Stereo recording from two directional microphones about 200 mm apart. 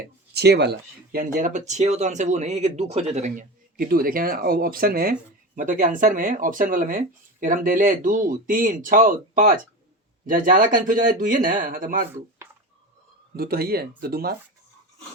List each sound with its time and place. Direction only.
0.3 s speech: 55° right (ahead or behind)
13.3 s speech: 50° right (ahead or behind)